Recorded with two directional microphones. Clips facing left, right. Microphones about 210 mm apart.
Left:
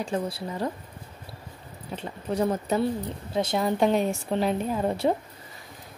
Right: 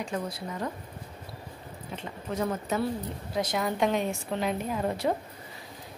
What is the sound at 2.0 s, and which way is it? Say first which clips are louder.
A woman's voice: left 5 dB; 35° left (ahead or behind).